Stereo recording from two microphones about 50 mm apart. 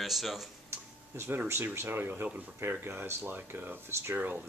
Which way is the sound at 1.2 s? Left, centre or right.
Right.